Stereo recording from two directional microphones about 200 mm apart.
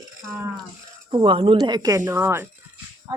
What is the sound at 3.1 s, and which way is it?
Speech, 20° right (ahead or behind).